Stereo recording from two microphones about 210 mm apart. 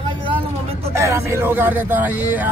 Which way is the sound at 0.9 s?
15° right (ahead or behind).